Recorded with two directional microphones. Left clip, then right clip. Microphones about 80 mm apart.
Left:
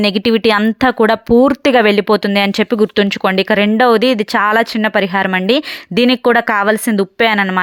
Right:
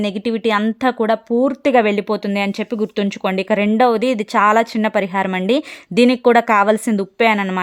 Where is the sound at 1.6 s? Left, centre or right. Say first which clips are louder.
Left 4 dB; left; by 6.9 s centre.